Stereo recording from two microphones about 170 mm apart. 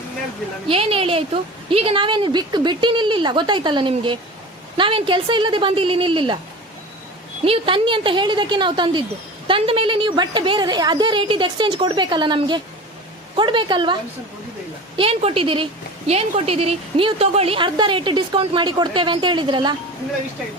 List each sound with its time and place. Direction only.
0.7 s a woman's voice: 35° right (ahead or behind)
7.4 s a woman's voice: 30° right (ahead or behind)